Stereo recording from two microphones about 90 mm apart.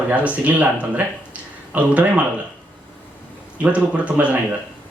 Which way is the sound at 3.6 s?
15° right (ahead or behind).